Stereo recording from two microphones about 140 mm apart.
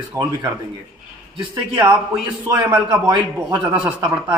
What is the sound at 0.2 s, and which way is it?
Speech, 20° right (ahead or behind).